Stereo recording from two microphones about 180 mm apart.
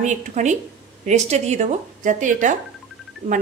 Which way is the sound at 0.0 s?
40° right (ahead or behind).